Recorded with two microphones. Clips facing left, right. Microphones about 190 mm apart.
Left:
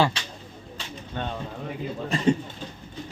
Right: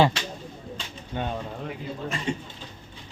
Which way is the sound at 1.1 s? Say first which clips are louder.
Right 2 dB; 15° right (ahead or behind).